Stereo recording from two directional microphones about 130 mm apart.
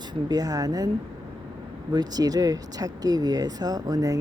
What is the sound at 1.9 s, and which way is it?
Speech, 30° right (ahead or behind).